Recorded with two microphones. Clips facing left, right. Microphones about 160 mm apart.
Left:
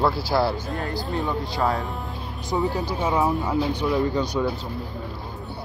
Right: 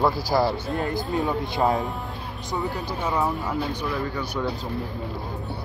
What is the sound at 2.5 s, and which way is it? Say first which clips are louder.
Speech: left 4 dB; 15° left (ahead or behind).